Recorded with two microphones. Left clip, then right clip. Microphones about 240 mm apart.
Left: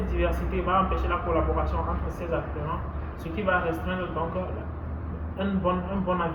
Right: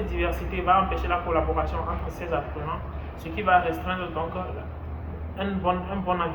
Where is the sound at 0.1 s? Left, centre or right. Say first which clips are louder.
Even; centre.